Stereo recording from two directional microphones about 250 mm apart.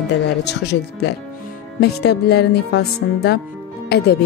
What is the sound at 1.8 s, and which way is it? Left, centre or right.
Speech, left.